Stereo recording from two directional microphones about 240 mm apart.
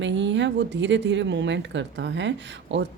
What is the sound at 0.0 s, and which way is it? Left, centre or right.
Speech, right.